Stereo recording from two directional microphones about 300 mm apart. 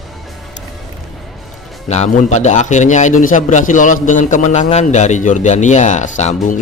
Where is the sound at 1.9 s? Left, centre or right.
Left.